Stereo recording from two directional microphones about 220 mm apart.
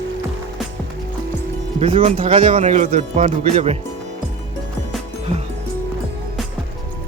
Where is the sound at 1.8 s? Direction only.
30° right (ahead or behind).